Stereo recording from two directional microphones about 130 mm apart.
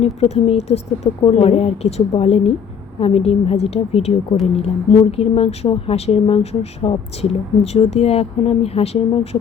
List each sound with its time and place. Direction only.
0.0 s a woman's voice: 55° left (ahead or behind)